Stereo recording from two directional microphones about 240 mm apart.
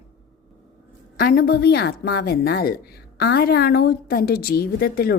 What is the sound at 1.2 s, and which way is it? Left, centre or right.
A woman's voice, left.